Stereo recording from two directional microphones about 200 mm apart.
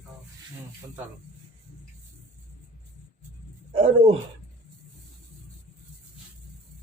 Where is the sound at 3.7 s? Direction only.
30° right (ahead or behind).